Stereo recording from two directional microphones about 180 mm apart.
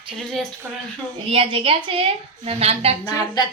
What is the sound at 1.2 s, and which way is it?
A woman's voice, 30° right (ahead or behind).